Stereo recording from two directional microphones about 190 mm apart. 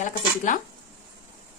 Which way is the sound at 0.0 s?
40° left (ahead or behind).